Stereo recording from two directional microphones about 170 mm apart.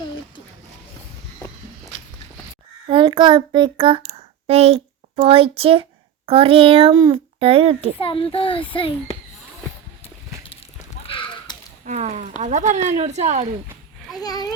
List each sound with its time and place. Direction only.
2.9 s child singing: 30° right (ahead or behind)
4.1 s a sound: 40° right (ahead or behind)
6.2 s speech: 35° right (ahead or behind)
7.9 s a child's voice: 30° left (ahead or behind)
11.0 s a sound: 30° left (ahead or behind)
11.9 s speech: 45° right (ahead or behind)
14.2 s a child's voice: 20° left (ahead or behind)